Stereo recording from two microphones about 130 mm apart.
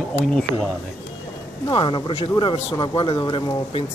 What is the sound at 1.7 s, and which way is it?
Speech, 40° left (ahead or behind).